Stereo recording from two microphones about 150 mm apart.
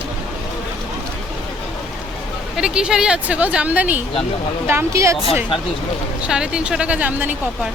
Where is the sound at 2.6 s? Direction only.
5° right (ahead or behind).